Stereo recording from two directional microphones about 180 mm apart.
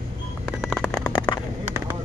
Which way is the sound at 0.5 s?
Centre (ahead or behind).